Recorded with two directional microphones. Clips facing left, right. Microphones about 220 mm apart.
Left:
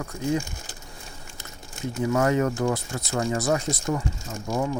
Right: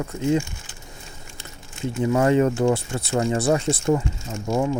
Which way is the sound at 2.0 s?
25° right (ahead or behind).